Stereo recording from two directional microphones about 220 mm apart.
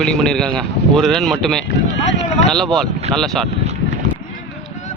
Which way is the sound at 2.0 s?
30° left (ahead or behind).